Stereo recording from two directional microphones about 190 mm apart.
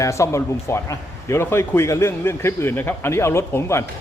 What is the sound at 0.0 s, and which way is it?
Speech, 15° left (ahead or behind).